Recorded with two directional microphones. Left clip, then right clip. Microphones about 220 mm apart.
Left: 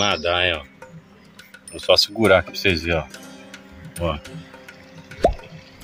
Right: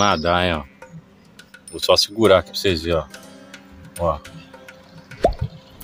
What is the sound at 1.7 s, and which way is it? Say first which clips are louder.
Speech: even; 15° right (ahead or behind).